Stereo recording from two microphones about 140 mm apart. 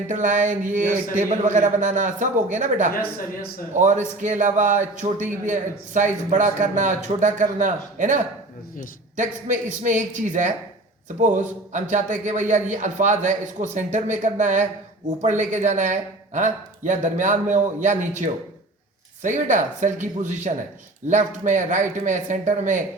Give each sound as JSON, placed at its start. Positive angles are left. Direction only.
{"t": 0.1, "sound": "a man's voice", "side_deg": -65}